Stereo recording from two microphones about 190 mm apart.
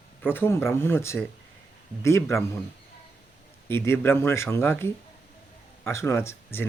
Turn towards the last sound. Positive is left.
turn(degrees=15)  # may be behind; listen again after turning